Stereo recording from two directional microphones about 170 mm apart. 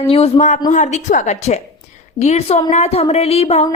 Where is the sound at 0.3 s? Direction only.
45° left (ahead or behind).